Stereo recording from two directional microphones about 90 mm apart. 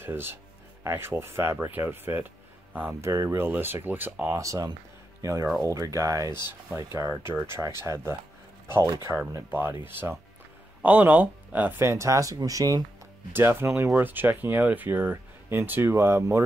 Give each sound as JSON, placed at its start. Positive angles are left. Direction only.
{"t": 0.0, "sound": "speech", "side_deg": -25}
{"t": 3.0, "sound": "speech", "side_deg": -35}
{"t": 4.4, "sound": "speech", "side_deg": -35}
{"t": 9.1, "sound": "speech", "side_deg": -5}
{"t": 9.5, "sound": "speech", "side_deg": -25}
{"t": 13.3, "sound": "speech", "side_deg": -25}
{"t": 13.9, "sound": "speech", "side_deg": -20}